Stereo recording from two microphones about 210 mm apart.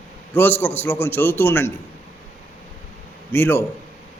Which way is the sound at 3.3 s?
10° left (ahead or behind).